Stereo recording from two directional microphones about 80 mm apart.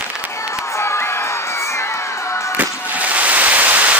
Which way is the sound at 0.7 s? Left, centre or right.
Left.